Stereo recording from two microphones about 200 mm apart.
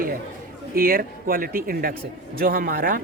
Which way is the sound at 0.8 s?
45° right (ahead or behind).